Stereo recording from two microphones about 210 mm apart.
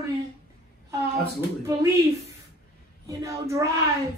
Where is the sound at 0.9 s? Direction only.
15° right (ahead or behind).